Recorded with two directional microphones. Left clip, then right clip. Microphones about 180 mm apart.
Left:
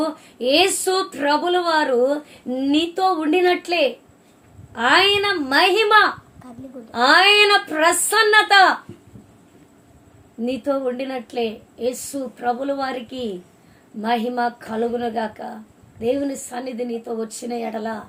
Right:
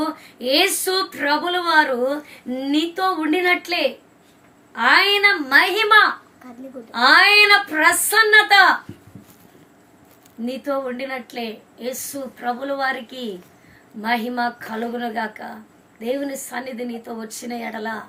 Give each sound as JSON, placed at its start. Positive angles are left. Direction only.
{"t": 0.3, "sound": "a woman's voice", "side_deg": 20}
{"t": 10.4, "sound": "a woman's voice", "side_deg": 25}